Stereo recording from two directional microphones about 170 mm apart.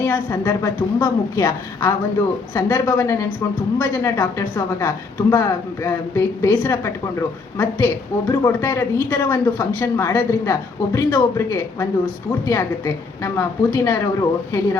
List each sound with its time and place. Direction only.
0.0 s speech: 20° left (ahead or behind)